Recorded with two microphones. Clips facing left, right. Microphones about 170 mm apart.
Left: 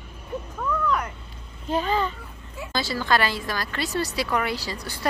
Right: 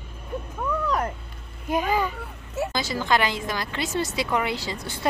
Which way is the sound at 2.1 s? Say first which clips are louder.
Right 8 dB; 70° right (ahead or behind).